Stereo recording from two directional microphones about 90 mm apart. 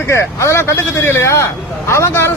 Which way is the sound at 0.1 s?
30° left (ahead or behind).